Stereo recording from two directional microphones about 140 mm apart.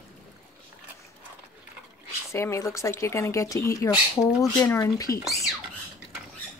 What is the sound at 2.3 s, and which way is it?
Speech, 20° left (ahead or behind).